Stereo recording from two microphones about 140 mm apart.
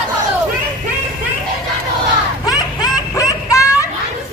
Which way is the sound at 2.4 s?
25° left (ahead or behind).